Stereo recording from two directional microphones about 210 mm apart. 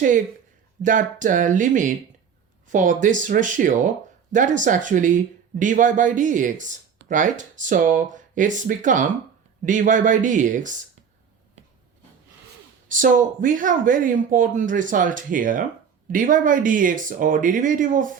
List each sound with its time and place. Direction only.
0.8 s speech: 40° right (ahead or behind)
12.9 s speech: 40° right (ahead or behind)